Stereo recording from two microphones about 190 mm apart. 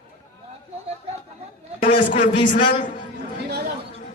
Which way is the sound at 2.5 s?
45° left (ahead or behind).